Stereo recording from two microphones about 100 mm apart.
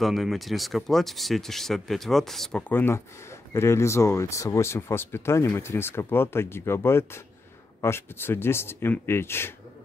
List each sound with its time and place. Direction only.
0.0 s speech: centre (ahead or behind)
2.7 s speech: 25° left (ahead or behind)